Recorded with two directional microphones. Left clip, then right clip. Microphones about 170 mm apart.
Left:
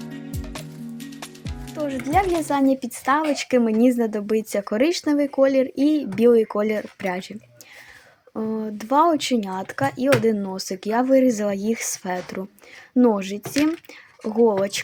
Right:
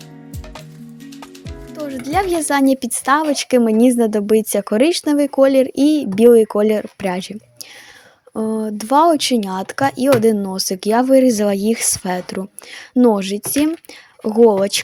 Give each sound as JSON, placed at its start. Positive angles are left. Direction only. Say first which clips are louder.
{"t": 1.9, "sound": "a woman's voice", "louder": "right 2 dB", "side_deg": -20}
{"t": 8.4, "sound": "a woman's voice", "louder": "right 6 dB", "side_deg": -25}